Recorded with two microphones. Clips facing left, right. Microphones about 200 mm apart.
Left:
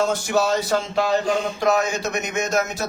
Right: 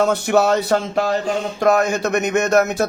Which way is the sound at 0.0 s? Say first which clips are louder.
Right 5 dB; 60° right (ahead or behind).